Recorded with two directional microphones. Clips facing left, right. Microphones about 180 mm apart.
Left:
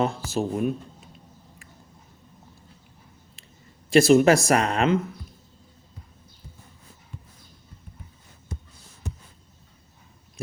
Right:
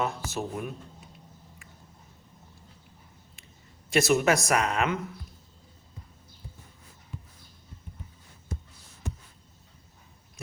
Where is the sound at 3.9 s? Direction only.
30° left (ahead or behind).